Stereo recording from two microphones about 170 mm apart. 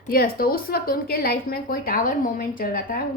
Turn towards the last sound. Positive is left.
turn(degrees=60)  # may be behind; listen again after turning